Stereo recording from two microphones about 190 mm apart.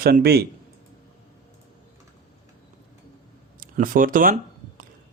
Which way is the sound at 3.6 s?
45° right (ahead or behind).